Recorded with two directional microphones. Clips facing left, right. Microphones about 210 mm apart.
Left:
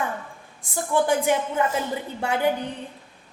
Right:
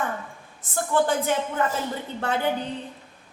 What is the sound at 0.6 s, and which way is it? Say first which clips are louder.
A woman's voice: even; 10° left (ahead or behind).